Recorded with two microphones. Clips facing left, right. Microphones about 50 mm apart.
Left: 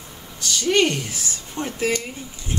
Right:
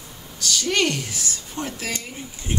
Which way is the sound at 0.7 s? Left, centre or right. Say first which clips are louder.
Left 4 dB; centre.